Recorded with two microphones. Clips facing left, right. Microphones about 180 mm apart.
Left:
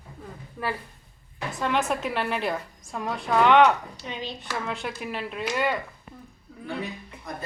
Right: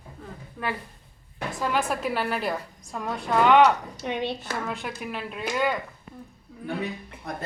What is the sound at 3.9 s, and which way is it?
Speech, 60° right (ahead or behind).